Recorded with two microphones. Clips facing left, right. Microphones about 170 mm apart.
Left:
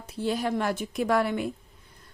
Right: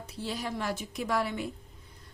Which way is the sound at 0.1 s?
55° left (ahead or behind).